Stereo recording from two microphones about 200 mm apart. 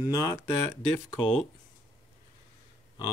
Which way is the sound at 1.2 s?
5° left (ahead or behind).